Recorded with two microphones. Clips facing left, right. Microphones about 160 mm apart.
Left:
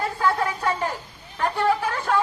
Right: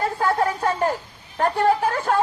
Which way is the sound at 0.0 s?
50° right (ahead or behind).